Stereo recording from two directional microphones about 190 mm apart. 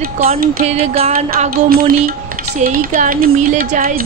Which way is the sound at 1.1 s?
50° right (ahead or behind).